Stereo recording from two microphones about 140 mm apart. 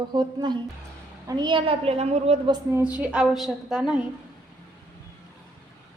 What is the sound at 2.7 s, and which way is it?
A woman's voice, 15° right (ahead or behind).